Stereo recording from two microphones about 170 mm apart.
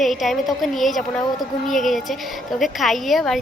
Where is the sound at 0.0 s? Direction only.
Centre (ahead or behind).